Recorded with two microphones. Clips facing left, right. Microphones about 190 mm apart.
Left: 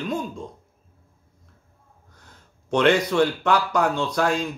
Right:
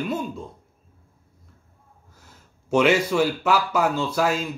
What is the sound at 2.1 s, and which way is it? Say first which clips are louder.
Speech: even; 5° right (ahead or behind).